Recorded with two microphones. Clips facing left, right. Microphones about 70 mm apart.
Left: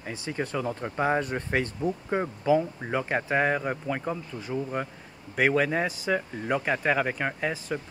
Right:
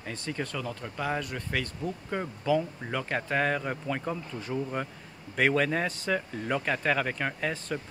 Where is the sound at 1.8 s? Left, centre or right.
Centre.